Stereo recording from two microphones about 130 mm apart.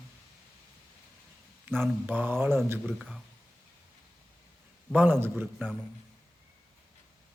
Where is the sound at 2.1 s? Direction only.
15° right (ahead or behind).